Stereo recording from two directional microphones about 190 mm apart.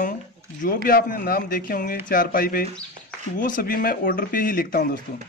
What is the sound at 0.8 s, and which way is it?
Speech, 50° left (ahead or behind).